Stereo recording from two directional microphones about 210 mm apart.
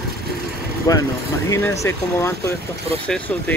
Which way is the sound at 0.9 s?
15° left (ahead or behind).